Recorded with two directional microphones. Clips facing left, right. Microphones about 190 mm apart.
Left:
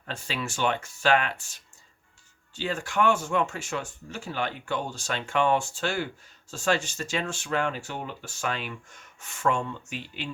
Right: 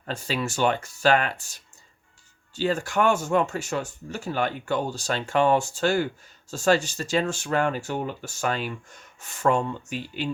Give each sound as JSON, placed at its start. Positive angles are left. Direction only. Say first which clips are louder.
{"t": 0.0, "sound": "speech", "louder": "right 5 dB", "side_deg": -40}